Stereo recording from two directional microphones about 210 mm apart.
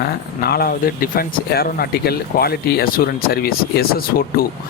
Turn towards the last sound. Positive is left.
turn(degrees=45)  # may be behind; listen again after turning